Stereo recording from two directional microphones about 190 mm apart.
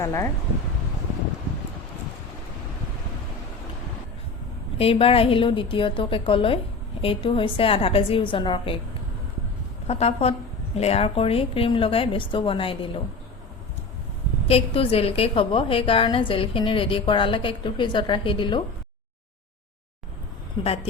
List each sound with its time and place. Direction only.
0.0 s speech: 15° left (ahead or behind)
4.8 s a woman's voice: 30° left (ahead or behind)
9.8 s a woman's voice: 35° left (ahead or behind)
14.4 s a woman's voice: 30° left (ahead or behind)